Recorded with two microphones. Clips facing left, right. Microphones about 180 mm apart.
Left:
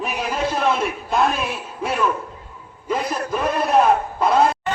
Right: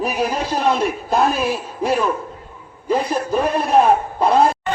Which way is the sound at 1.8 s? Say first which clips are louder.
Right 2 dB; 35° right (ahead or behind).